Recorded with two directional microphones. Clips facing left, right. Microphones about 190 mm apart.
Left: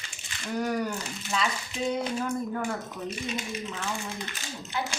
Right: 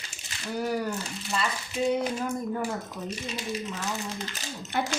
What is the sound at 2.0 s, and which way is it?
Speech, 5° right (ahead or behind).